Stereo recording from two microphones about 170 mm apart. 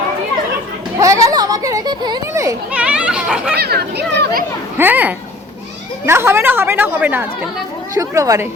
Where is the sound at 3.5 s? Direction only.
70° right (ahead or behind).